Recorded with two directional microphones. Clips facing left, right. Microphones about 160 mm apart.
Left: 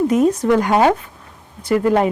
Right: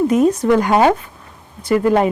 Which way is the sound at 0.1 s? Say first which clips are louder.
Right 1 dB; 5° right (ahead or behind).